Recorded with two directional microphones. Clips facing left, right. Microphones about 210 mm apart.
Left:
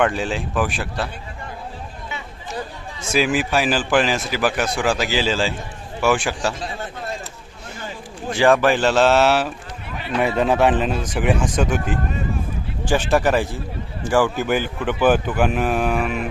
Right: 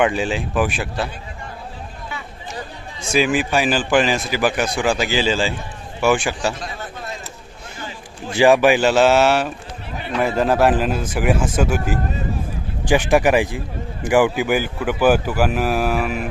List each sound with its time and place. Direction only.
0.0 s a man's voice: 5° right (ahead or behind)
3.1 s a man's voice: 5° left (ahead or behind)
8.4 s a man's voice: 10° right (ahead or behind)